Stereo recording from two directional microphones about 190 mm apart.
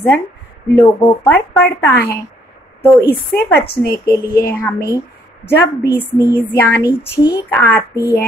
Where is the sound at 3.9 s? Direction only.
20° left (ahead or behind).